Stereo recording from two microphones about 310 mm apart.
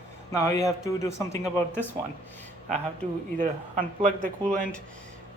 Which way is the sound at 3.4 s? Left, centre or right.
Right.